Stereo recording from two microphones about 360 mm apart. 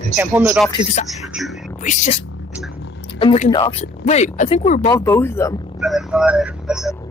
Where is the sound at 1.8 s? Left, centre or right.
Centre.